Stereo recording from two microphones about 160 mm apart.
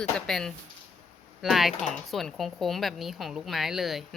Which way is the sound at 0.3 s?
Centre (ahead or behind).